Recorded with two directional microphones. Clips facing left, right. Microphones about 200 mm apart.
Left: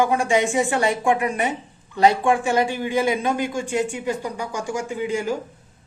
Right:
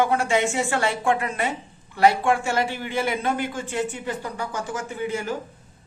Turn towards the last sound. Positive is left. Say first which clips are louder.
# left 3 dB
turn(degrees=15)  # may be behind; listen again after turning